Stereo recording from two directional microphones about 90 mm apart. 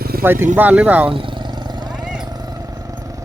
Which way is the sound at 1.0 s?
75° right (ahead or behind).